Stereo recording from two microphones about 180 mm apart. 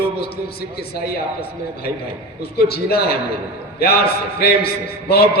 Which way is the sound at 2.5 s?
60° left (ahead or behind).